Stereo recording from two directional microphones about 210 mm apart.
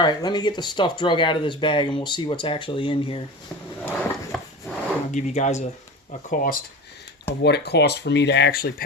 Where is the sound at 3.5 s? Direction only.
10° left (ahead or behind).